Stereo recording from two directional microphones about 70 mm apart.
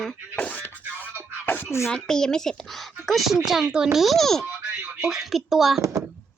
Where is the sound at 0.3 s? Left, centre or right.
Centre.